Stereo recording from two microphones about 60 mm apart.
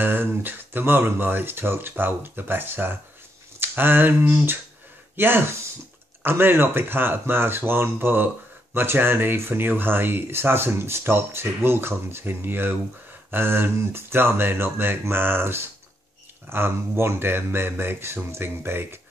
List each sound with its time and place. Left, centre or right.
0.0 s speech: right